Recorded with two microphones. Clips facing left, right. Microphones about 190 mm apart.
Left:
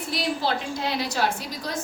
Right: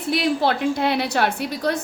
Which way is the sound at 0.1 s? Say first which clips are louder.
Right 6 dB; 60° right (ahead or behind).